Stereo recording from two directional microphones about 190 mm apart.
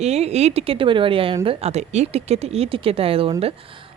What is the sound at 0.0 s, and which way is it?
Speech, 35° right (ahead or behind).